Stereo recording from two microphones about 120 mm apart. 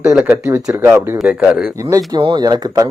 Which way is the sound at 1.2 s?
10° right (ahead or behind).